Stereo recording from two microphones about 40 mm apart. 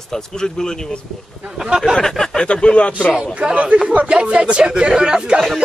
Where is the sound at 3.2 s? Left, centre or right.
Right.